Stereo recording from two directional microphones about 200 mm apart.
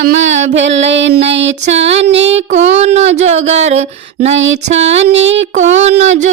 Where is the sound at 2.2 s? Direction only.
35° right (ahead or behind).